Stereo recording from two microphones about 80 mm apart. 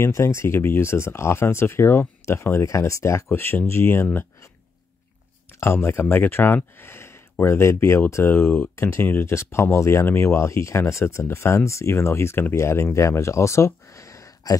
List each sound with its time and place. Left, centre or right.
0.0 s speech: left
5.6 s speech: left